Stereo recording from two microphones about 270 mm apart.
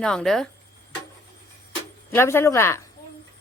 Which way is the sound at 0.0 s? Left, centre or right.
Centre.